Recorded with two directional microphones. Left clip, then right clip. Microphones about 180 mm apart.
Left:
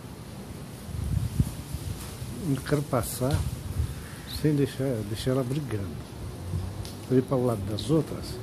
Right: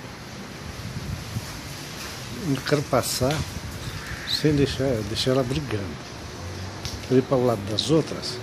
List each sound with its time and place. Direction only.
2.5 s speech: 10° right (ahead or behind)
4.4 s speech: 20° right (ahead or behind)
7.2 s speech: 15° right (ahead or behind)